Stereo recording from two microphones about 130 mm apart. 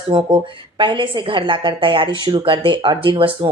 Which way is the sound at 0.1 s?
40° right (ahead or behind).